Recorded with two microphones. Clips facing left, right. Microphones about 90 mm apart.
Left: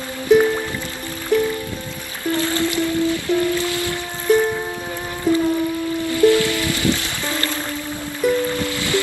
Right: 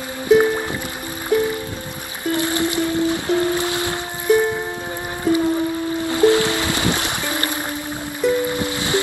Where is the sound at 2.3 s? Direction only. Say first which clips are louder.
Even; 20° right (ahead or behind).